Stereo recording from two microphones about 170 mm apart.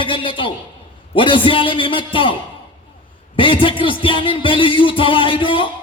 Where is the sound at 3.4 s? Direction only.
30° left (ahead or behind).